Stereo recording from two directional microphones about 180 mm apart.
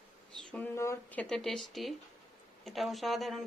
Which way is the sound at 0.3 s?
10° left (ahead or behind).